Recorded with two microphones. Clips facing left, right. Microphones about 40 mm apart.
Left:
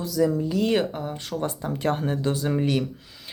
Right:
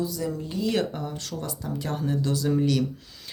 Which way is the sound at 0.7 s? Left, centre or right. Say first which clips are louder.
Left 3 dB; left.